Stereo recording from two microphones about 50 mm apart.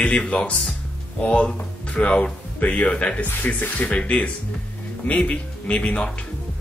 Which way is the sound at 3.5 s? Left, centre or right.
Left.